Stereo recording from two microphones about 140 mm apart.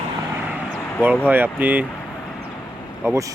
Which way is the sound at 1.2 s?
15° right (ahead or behind).